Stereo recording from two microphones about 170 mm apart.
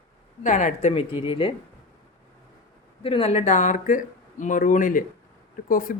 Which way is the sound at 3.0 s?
35° left (ahead or behind).